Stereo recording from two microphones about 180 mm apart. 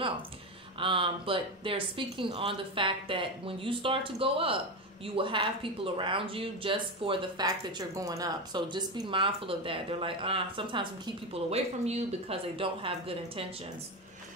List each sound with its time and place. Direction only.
0.7 s speech: 30° right (ahead or behind)